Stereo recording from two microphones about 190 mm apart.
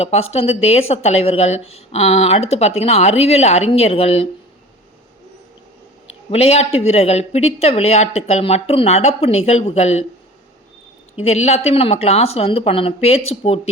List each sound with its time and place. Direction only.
0.0 s a woman's voice: 35° left (ahead or behind)
6.3 s a woman's voice: 35° left (ahead or behind)
11.2 s a woman's voice: 35° left (ahead or behind)